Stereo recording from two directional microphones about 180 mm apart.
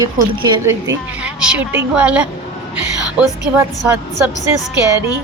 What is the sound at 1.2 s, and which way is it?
A woman's voice, 5° right (ahead or behind).